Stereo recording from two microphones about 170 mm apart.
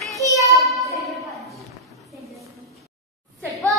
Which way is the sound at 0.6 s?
Centre (ahead or behind).